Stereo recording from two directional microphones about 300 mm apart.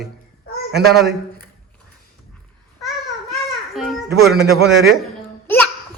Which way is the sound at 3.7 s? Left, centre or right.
Centre.